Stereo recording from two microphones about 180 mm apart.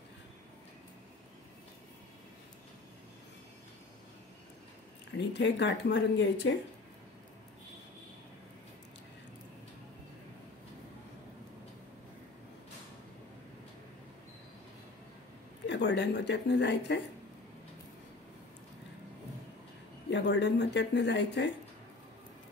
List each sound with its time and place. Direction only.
5.1 s speech: 80° left
15.6 s speech: 75° left (ahead or behind)
20.1 s speech: 80° left